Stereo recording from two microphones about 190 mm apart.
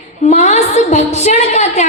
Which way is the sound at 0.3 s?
35° left (ahead or behind).